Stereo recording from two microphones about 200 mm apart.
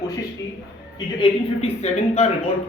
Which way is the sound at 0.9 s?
25° left (ahead or behind).